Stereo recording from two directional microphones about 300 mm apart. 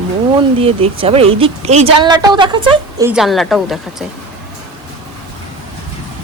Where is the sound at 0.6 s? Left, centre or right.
Centre.